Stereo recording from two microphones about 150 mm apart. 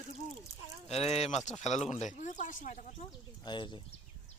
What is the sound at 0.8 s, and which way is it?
Speech, 45° left (ahead or behind).